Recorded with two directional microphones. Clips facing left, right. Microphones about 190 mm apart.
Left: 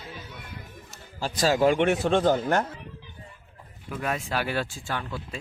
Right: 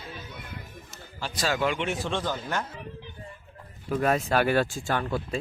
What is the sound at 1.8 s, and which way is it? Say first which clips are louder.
Speech: left 8 dB; 55° left (ahead or behind).